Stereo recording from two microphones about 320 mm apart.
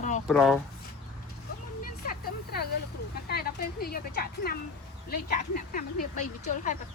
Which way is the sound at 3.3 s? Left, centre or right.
Left.